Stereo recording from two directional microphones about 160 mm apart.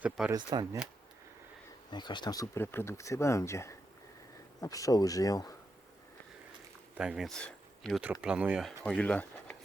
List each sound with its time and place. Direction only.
0.3 s speech: 25° right (ahead or behind)
1.9 s speech: 30° left (ahead or behind)
6.9 s speech: 5° right (ahead or behind)